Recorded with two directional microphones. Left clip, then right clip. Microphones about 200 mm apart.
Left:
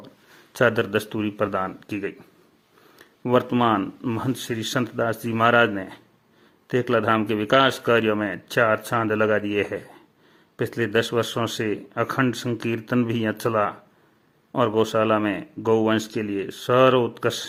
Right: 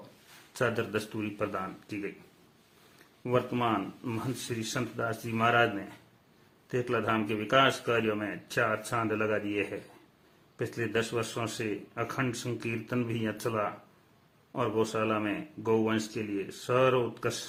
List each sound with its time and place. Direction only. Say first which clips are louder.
0.5 s speech: left 10 dB; 40° left (ahead or behind)
3.2 s speech: left 9 dB; 40° left (ahead or behind)